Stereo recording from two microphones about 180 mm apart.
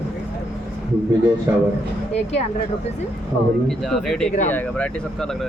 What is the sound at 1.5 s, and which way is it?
Speech, 15° right (ahead or behind).